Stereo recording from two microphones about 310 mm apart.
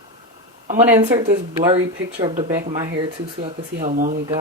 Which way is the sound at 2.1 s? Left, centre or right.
Right.